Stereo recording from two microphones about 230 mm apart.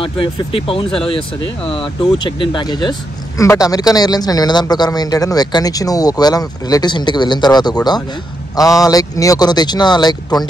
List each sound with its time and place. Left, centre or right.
0.0 s speech: left